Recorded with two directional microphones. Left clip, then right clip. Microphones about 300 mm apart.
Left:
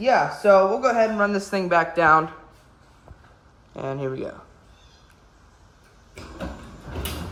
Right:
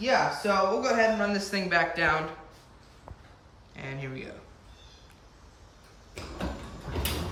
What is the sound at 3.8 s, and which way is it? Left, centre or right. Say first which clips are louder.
Speech: left 10 dB; centre.